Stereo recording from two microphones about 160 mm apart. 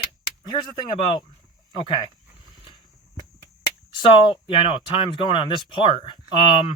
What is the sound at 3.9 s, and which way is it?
Speech, 30° left (ahead or behind).